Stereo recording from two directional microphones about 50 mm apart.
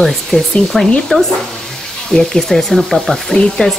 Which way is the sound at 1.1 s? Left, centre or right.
Centre.